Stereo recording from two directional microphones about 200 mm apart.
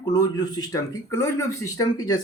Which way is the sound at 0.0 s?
20° left (ahead or behind).